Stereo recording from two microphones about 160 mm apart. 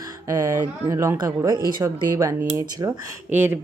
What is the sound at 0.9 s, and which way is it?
Speech, 20° right (ahead or behind).